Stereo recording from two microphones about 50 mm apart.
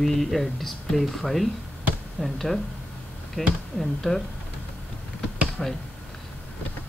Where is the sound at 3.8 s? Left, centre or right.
Centre.